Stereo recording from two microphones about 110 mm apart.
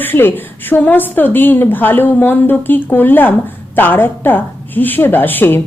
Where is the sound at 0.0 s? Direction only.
20° left (ahead or behind).